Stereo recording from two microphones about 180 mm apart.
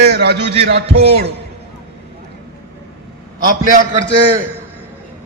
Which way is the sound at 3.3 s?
50° right (ahead or behind).